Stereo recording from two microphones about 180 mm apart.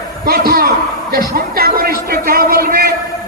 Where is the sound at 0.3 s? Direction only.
55° right (ahead or behind).